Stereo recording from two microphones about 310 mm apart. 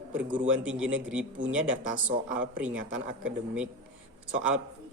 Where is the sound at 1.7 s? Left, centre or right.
Right.